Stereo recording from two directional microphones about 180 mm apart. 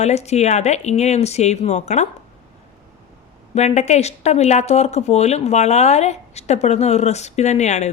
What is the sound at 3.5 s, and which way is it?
Speech, 40° left (ahead or behind).